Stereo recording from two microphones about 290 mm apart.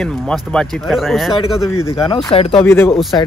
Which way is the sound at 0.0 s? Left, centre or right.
Centre.